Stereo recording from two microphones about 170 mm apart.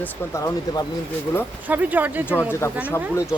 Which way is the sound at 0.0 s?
20° left (ahead or behind).